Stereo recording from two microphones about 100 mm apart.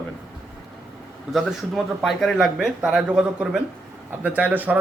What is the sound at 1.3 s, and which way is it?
A man's voice, centre (ahead or behind).